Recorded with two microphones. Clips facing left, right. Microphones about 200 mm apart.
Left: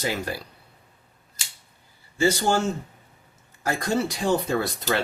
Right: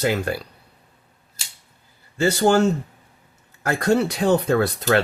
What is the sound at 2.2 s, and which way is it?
Speech, 60° right (ahead or behind).